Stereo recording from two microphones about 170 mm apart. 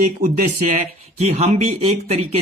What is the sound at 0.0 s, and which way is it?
Speech, 50° right (ahead or behind).